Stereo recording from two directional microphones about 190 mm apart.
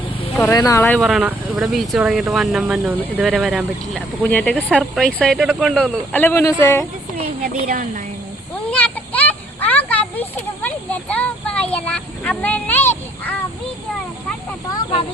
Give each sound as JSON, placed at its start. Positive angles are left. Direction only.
{"t": 0.5, "sound": "speech", "side_deg": 15}
{"t": 0.9, "sound": "speech", "side_deg": 0}
{"t": 7.4, "sound": "a woman's voice", "side_deg": -45}
{"t": 8.7, "sound": "children playing", "side_deg": 10}